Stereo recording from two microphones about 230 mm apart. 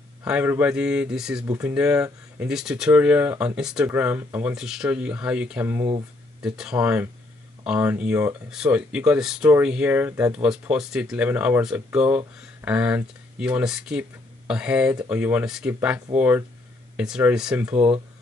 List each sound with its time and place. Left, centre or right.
0.2 s speech: centre